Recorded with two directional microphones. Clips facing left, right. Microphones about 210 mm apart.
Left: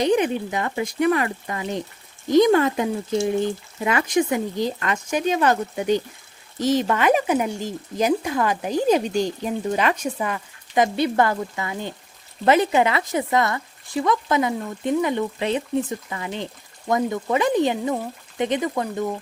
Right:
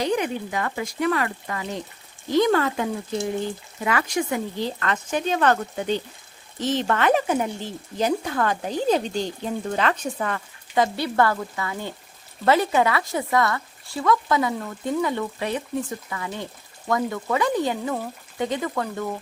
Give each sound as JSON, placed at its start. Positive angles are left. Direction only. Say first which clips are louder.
{"t": 0.0, "sound": "speech", "louder": "left 4 dB", "side_deg": 20}